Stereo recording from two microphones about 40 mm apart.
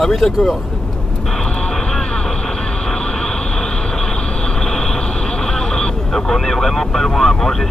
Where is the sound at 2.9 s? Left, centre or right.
Centre.